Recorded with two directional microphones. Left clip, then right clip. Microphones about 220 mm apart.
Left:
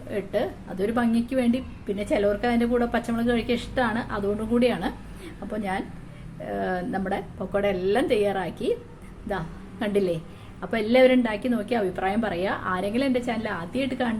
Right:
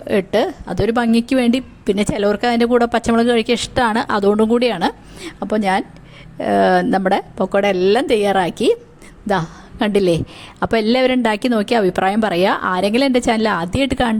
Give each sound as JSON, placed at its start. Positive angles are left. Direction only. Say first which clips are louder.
{"t": 0.1, "sound": "a woman's voice", "louder": "right 11 dB", "side_deg": -50}